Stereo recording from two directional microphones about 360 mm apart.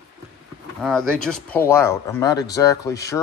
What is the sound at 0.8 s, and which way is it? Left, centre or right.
Speech, centre.